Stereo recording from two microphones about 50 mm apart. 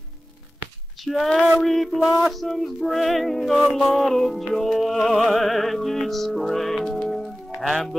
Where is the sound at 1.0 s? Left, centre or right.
Centre.